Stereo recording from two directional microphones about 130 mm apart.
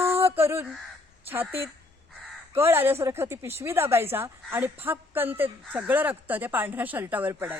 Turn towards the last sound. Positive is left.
turn(degrees=-15)  # may be behind; listen again after turning